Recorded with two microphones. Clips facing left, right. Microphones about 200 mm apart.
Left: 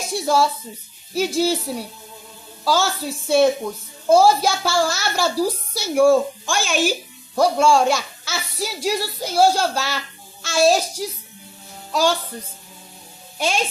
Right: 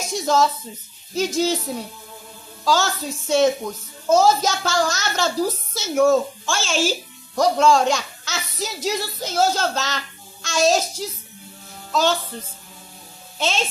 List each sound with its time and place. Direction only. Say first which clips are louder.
0.1 s a woman's voice: even; 10° left (ahead or behind)
13.4 s a woman's voice: left 1 dB; 10° left (ahead or behind)